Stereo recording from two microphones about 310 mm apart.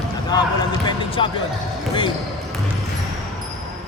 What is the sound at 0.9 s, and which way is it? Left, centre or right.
Basketball bounce, centre.